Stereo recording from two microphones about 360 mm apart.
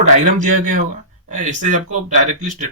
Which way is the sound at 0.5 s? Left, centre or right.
Right.